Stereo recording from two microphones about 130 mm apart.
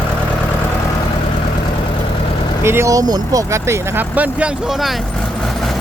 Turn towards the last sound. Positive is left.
turn(degrees=0)  # may be behind; listen again after turning